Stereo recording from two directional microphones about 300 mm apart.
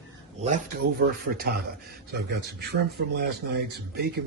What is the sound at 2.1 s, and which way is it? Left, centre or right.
Speech, right.